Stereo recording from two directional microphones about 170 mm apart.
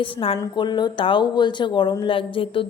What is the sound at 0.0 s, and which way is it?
A woman's voice, 30° left (ahead or behind).